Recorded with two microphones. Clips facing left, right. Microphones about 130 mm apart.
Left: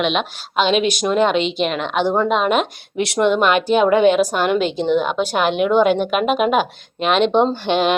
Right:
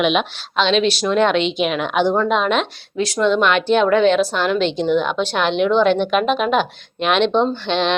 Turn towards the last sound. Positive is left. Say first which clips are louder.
# left 2 dB
turn(degrees=10)  # may be behind; listen again after turning